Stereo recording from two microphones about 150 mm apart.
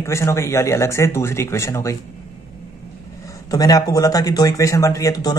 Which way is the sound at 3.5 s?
25° left (ahead or behind).